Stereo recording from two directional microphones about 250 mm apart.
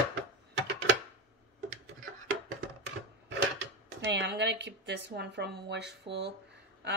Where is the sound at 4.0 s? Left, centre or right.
Right.